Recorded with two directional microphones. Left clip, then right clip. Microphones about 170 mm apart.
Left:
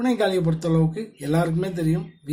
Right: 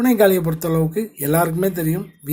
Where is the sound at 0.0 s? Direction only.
40° right (ahead or behind).